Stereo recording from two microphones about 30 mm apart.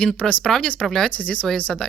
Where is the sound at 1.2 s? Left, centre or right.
Left.